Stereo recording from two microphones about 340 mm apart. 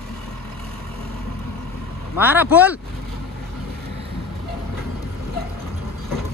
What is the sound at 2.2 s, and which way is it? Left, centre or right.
Speech, centre.